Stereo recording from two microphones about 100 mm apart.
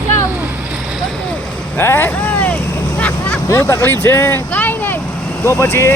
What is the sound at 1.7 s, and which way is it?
Vehicle, 25° left (ahead or behind).